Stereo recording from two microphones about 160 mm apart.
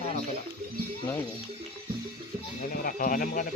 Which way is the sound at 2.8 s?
60° left (ahead or behind).